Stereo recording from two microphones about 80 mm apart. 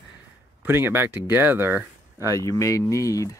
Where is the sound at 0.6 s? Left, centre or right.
Right.